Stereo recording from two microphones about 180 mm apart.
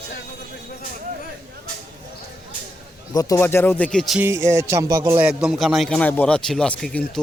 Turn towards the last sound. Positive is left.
turn(degrees=5)  # may be behind; listen again after turning